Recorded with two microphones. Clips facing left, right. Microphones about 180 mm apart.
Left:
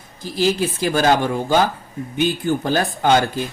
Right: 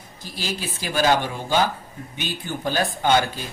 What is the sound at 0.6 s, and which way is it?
Speech, 50° left (ahead or behind).